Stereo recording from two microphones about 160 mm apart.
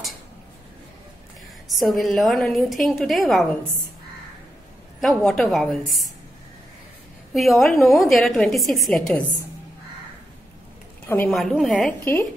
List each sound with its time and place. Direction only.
1.7 s a woman's voice: centre (ahead or behind)
5.0 s a woman's voice: centre (ahead or behind)
7.3 s a woman's voice: centre (ahead or behind)
11.2 s a woman's voice: centre (ahead or behind)
12.0 s speech: 15° left (ahead or behind)